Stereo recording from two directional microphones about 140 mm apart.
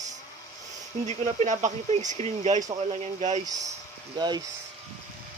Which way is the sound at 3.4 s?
25° right (ahead or behind).